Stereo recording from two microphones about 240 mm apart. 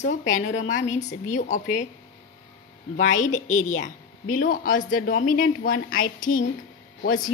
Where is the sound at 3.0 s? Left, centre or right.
Left.